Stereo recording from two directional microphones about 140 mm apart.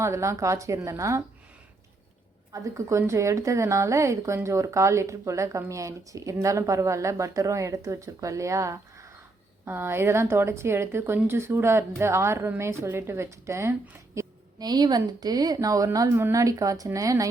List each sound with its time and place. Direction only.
0.0 s a woman's voice: 20° right (ahead or behind)
2.5 s a woman's voice: 20° right (ahead or behind)